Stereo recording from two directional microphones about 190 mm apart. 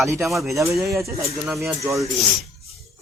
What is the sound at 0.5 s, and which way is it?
Speech, 15° right (ahead or behind).